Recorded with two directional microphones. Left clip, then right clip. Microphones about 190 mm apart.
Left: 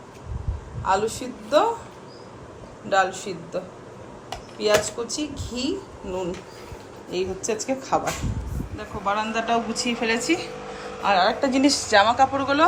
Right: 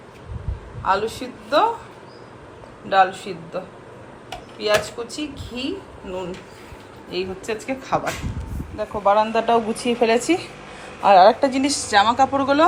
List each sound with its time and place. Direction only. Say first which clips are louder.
0.9 s a woman's voice: right 2 dB; 10° left (ahead or behind)
2.9 s a woman's voice: right 4 dB; 10° left (ahead or behind)
8.8 s speech: right 8 dB; 15° right (ahead or behind)
10.8 s a sound: right 8 dB; centre (ahead or behind)
11.3 s a woman's voice: even; 10° left (ahead or behind)